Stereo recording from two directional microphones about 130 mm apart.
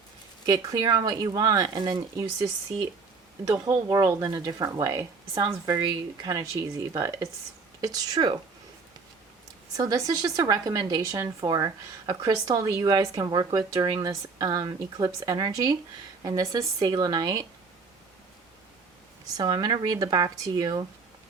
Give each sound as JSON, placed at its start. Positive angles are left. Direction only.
{"t": 0.4, "sound": "a woman's voice", "side_deg": -30}
{"t": 9.7, "sound": "a woman's voice", "side_deg": -25}
{"t": 19.4, "sound": "speech", "side_deg": -30}